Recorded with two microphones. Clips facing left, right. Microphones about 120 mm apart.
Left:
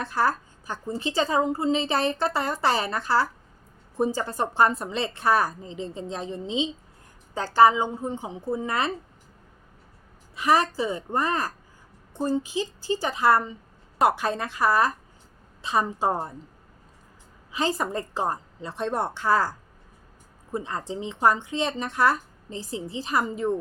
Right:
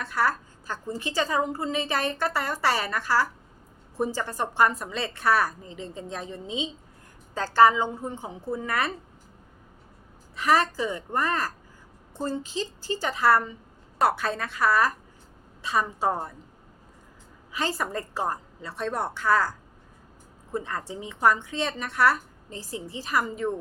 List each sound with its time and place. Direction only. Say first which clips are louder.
0.0 s a woman's voice: left 2 dB; 25° left (ahead or behind)
10.3 s a woman's voice: left 1 dB; 15° left (ahead or behind)
17.5 s a woman's voice: left 3 dB; 20° left (ahead or behind)
20.5 s a woman's voice: left 1 dB; 20° left (ahead or behind)